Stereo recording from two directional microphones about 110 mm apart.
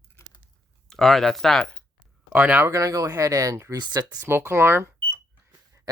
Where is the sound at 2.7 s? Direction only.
30° right (ahead or behind).